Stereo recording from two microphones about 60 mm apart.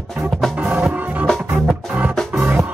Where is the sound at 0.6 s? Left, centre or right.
Right.